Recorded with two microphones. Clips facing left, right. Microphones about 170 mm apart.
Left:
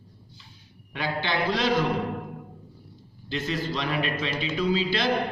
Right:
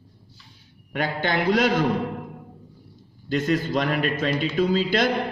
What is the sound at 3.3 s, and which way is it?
A man's voice, 50° right (ahead or behind).